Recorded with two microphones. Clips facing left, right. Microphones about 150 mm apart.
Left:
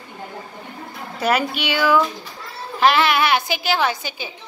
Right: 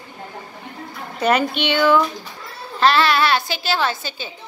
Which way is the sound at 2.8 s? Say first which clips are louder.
Even; 15° left (ahead or behind).